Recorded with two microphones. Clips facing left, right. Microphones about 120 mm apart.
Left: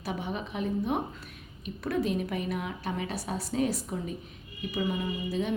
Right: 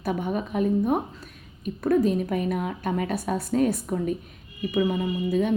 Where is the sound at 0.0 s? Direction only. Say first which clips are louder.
Right 7 dB; 50° right (ahead or behind).